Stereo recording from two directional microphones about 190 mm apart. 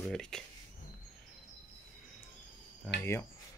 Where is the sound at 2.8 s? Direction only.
5° left (ahead or behind).